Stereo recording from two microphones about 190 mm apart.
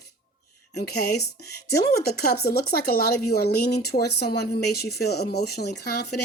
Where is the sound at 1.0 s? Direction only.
55° left (ahead or behind).